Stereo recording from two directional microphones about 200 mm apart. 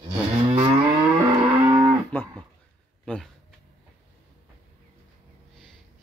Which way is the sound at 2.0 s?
5° left (ahead or behind).